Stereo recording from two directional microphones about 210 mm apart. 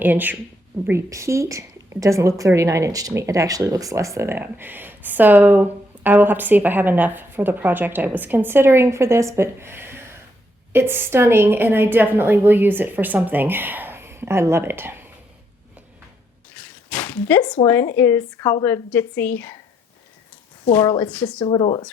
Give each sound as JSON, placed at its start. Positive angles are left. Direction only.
{"t": 0.0, "sound": "a woman's voice", "side_deg": -10}
{"t": 16.6, "sound": "a sound", "side_deg": 5}
{"t": 17.5, "sound": "a woman's voice", "side_deg": 15}
{"t": 20.7, "sound": "a woman's voice", "side_deg": 15}
{"t": 21.1, "sound": "a woman's voice", "side_deg": 5}
{"t": 21.4, "sound": "speech", "side_deg": 20}